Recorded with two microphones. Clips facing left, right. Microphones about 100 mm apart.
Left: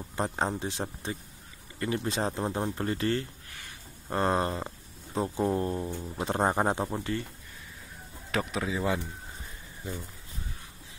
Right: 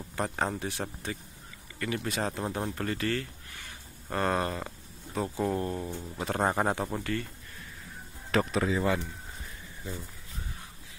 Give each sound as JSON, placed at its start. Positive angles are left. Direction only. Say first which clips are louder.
{"t": 0.1, "sound": "speech", "louder": "left 1 dB", "side_deg": 25}
{"t": 8.3, "sound": "speech", "louder": "right 4 dB", "side_deg": 5}